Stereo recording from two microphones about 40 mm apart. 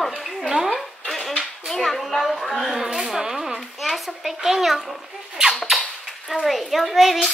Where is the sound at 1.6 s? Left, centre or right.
Centre.